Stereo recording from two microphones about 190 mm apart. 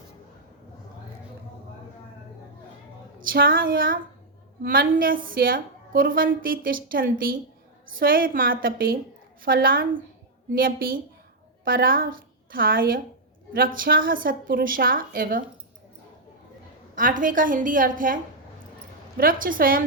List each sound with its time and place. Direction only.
3.2 s a woman's voice: 50° right (ahead or behind)
16.9 s a woman's voice: 45° right (ahead or behind)